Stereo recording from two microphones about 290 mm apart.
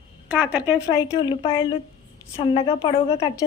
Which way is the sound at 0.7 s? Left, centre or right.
Centre.